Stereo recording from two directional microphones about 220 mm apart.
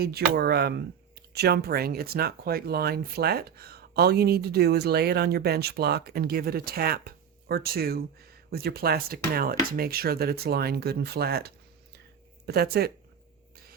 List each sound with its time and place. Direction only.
0.0 s speech: 45° right (ahead or behind)